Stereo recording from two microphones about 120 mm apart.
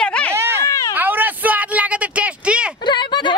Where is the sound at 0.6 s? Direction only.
25° left (ahead or behind).